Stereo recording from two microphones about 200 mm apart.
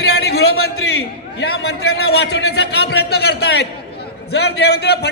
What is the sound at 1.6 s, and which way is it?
A man's voice, 55° left (ahead or behind).